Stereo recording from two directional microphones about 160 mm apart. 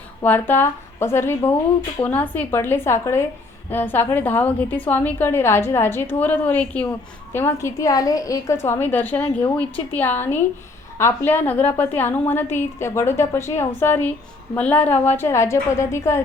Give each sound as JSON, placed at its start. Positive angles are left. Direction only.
{"t": 0.2, "sound": "a woman's voice", "side_deg": 10}